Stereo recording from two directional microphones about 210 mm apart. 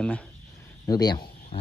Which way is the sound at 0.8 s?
20° left (ahead or behind).